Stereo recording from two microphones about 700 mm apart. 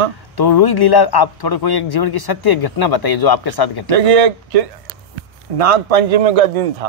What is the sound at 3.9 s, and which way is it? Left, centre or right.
Speech, right.